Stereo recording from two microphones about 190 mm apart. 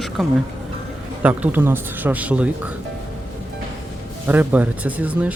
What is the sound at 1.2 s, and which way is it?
Speech, 10° right (ahead or behind).